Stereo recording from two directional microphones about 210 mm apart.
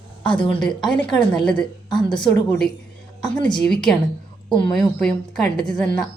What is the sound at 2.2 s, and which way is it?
Speech, 5° left (ahead or behind).